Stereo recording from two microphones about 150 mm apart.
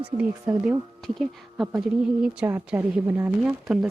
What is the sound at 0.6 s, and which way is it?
A woman's voice, 5° right (ahead or behind).